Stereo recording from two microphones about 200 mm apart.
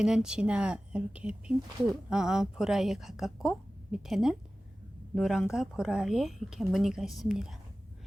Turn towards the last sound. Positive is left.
turn(degrees=0)  # may be behind; listen again after turning